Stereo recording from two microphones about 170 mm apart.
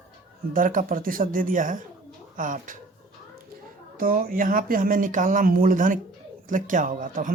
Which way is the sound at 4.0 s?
55° right (ahead or behind).